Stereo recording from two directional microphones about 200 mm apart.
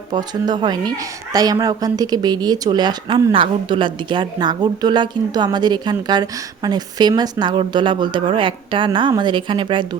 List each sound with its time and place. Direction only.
0.1 s speech: 20° right (ahead or behind)